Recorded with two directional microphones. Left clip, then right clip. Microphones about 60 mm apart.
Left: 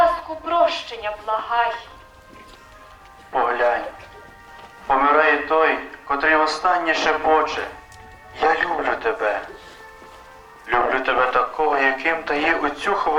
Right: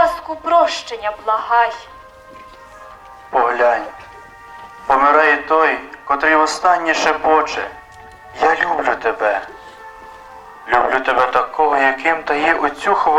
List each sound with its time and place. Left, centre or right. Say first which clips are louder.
0.3 s speech: right 5 dB; right
3.3 s speech: right 5 dB; right
4.9 s speech: right 4 dB; right
9.2 s speech: right 5 dB; right
10.7 s speech: right 4 dB; right